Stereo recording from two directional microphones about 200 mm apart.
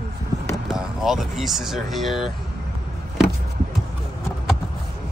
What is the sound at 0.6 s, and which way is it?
Speech, centre (ahead or behind).